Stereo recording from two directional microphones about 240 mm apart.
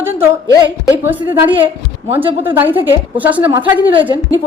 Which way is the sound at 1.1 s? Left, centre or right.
Centre.